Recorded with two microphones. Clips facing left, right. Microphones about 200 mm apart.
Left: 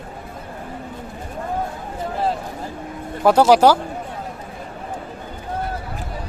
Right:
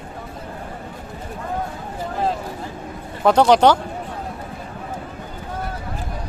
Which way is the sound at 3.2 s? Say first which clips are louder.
Left 1 dB; 5° left (ahead or behind).